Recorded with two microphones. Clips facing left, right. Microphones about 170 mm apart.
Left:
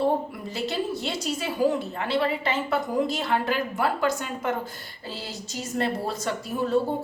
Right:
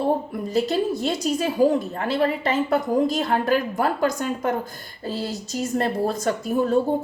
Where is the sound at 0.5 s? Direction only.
45° right (ahead or behind).